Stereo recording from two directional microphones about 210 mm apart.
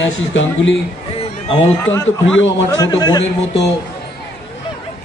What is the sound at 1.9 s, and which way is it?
Speech, 65° left (ahead or behind).